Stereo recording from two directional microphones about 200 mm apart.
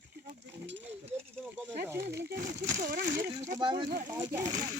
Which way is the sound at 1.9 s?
55° right (ahead or behind).